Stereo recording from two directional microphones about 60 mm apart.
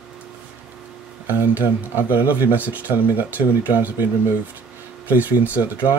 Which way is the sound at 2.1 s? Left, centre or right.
Right.